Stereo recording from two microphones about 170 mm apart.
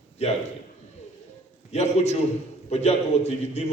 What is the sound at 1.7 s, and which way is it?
A man's voice, 40° left (ahead or behind).